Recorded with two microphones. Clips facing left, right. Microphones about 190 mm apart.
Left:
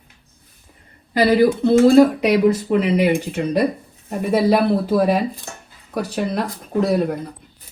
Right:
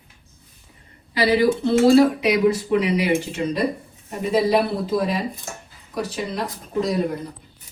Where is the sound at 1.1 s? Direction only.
55° left (ahead or behind).